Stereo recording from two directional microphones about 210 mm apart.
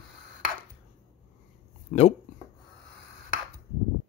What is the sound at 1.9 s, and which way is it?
Speech, 35° left (ahead or behind).